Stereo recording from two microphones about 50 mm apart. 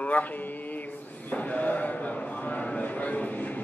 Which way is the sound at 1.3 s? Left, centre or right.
Left.